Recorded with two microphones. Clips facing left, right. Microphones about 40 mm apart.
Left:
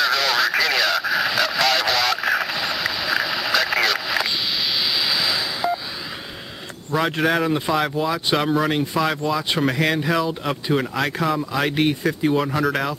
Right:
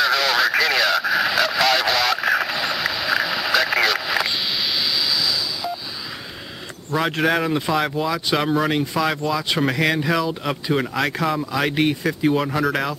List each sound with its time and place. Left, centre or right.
0.0 s radio: centre
4.9 s a sound: left
6.9 s speech: centre